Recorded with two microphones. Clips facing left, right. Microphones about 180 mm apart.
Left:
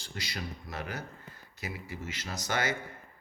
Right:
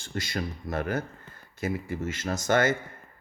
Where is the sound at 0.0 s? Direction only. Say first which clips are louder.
Right 8 dB; 50° right (ahead or behind).